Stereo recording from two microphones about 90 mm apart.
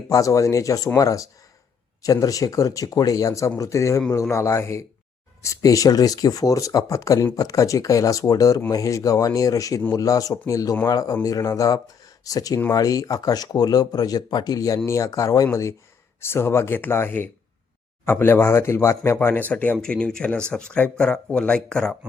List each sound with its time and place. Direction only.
0.1 s speech: 40° left (ahead or behind)
16.2 s speech: 30° left (ahead or behind); by 21.9 s 10° left (ahead or behind)